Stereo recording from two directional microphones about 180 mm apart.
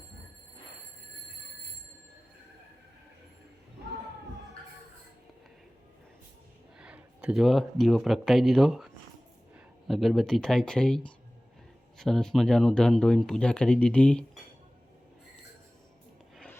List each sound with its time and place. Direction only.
6.7 s speech: 5° right (ahead or behind)